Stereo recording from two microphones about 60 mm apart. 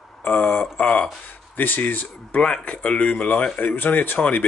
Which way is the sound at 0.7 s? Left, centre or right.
Left.